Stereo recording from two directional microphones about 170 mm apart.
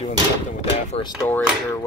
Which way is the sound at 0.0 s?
40° left (ahead or behind).